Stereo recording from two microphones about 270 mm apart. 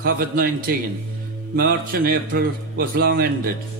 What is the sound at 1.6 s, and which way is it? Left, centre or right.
Speech, right.